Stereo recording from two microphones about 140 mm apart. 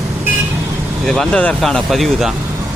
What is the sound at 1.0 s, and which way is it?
Speech, 5° left (ahead or behind).